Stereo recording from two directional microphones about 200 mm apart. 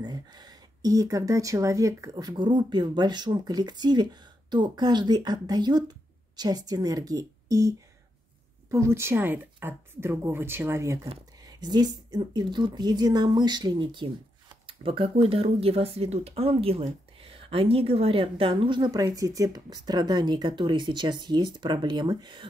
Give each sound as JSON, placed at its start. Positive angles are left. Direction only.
{"t": 0.0, "sound": "a woman's voice", "side_deg": -20}